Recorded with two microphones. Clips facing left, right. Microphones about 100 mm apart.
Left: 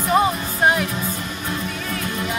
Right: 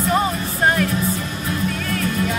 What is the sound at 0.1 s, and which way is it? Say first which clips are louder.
Music: left 4 dB; 10° left (ahead or behind).